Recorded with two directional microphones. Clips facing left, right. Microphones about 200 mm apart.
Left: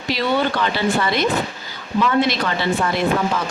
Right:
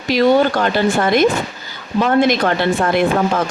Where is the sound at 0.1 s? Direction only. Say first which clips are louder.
Right 7 dB; 45° right (ahead or behind).